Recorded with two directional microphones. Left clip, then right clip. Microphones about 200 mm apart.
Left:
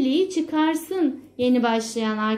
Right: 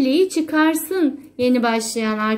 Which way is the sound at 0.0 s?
25° right (ahead or behind).